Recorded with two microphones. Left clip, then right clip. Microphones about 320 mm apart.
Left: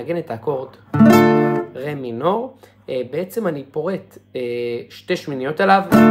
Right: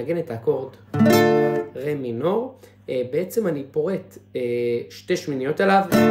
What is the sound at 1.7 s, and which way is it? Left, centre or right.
Speech, centre.